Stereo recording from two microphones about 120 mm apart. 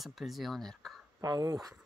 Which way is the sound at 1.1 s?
30° right (ahead or behind).